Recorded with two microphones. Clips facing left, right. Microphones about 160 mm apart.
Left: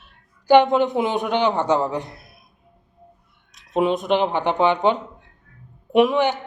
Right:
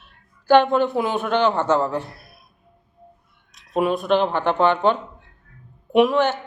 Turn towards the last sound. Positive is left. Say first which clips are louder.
# even
turn(degrees=0)  # may be behind; listen again after turning